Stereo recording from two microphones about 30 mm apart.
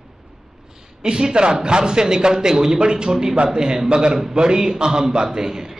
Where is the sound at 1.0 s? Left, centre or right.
Right.